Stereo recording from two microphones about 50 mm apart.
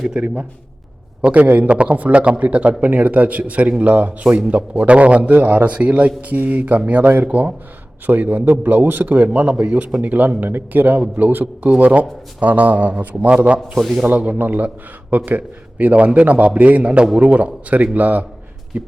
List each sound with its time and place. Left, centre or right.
0.0 s a man's voice: centre
1.2 s a man's voice: right
13.7 s speech: centre
14.1 s a man's voice: right